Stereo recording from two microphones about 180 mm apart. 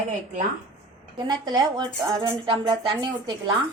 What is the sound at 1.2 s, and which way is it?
Speech, 25° right (ahead or behind).